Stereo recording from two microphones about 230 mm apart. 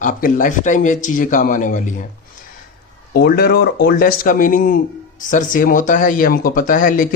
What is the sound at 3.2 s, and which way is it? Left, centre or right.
Speech, left.